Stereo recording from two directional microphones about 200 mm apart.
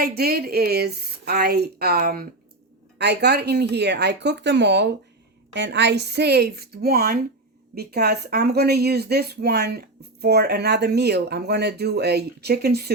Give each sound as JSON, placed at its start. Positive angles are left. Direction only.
{"t": 0.0, "sound": "speech", "side_deg": -50}